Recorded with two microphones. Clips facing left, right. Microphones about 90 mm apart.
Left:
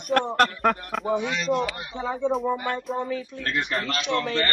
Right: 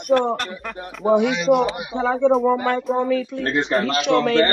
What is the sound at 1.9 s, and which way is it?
Speech, 90° right.